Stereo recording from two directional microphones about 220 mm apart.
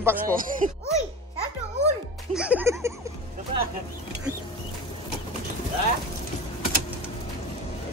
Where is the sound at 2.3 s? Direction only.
5° right (ahead or behind).